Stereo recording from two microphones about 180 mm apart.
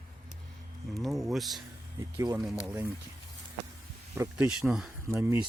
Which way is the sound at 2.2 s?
20° right (ahead or behind).